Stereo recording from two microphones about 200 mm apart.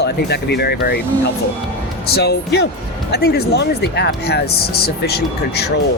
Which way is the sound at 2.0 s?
55° left (ahead or behind).